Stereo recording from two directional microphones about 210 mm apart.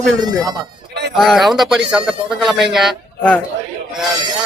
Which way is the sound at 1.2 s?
Centre (ahead or behind).